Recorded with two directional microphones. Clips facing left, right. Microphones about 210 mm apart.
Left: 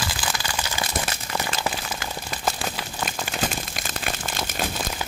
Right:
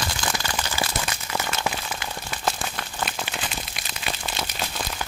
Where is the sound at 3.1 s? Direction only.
45° left (ahead or behind).